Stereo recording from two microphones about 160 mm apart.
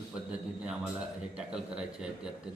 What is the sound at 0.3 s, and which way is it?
A man's voice, 5° right (ahead or behind).